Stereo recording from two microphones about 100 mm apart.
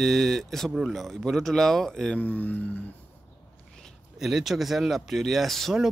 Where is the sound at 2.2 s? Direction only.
15° left (ahead or behind).